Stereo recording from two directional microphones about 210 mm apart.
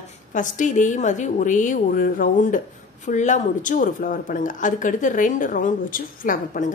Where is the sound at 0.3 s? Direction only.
40° left (ahead or behind).